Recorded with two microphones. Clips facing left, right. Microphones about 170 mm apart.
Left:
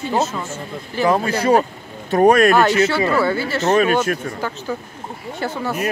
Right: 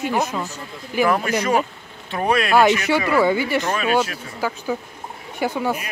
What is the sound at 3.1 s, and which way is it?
Speech, 15° right (ahead or behind).